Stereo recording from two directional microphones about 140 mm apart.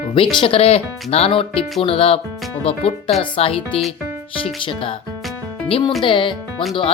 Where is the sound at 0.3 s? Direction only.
40° left (ahead or behind).